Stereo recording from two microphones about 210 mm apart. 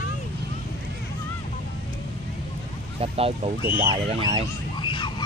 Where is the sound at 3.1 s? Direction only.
30° right (ahead or behind).